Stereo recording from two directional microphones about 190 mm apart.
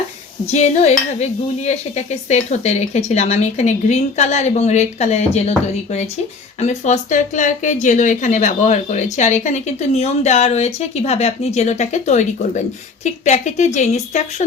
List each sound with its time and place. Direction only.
0.5 s dishes: 35° left (ahead or behind)